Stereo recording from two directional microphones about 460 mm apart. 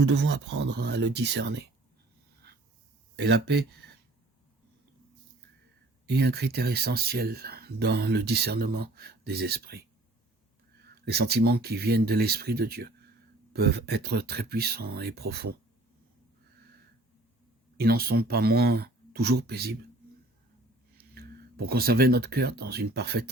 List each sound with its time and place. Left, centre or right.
0.0 s speech: right
3.2 s speech: right
6.1 s speech: right
11.1 s speech: right
17.7 s speech: centre
21.0 s speech: centre